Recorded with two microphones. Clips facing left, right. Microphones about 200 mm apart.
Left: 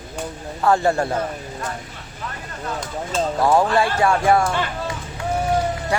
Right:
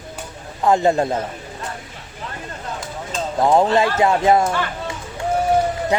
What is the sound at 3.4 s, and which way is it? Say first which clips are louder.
Speech: right 3 dB; 20° right (ahead or behind).